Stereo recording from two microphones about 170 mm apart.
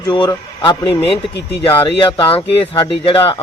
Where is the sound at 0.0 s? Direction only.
25° left (ahead or behind).